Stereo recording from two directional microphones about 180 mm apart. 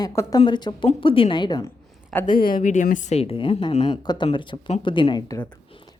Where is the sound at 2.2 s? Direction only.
50° left (ahead or behind).